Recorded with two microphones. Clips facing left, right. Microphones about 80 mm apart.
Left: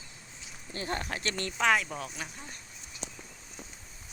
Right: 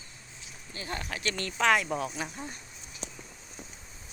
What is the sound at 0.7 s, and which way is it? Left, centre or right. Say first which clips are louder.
Speech: left 3 dB; left.